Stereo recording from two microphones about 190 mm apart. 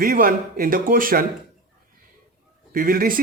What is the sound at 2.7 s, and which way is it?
Speech, 50° right (ahead or behind).